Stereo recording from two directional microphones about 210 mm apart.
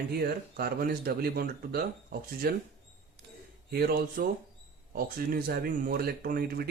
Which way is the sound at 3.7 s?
45° right (ahead or behind).